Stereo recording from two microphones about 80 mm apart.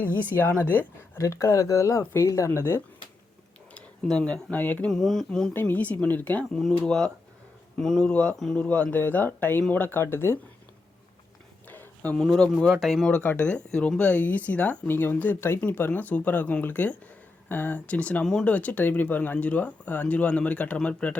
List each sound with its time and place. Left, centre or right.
0.0 s speech: left
1.2 s speech: left
3.8 s speech: centre
4.9 s speech: centre
5.5 s speech: left
6.8 s speech: centre; by 10.3 s left
11.7 s a sound: left
12.4 s speech: centre
13.1 s speech: centre
14.8 s speech: left